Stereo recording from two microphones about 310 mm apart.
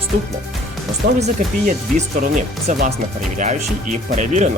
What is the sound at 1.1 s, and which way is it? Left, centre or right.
Speech, right.